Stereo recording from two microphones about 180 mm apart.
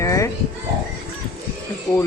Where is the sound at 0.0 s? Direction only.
15° left (ahead or behind).